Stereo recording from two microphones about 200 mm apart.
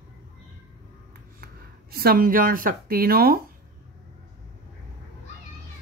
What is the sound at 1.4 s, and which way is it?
Speech, 50° right (ahead or behind).